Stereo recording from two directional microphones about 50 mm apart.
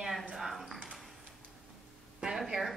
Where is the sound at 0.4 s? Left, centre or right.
Centre.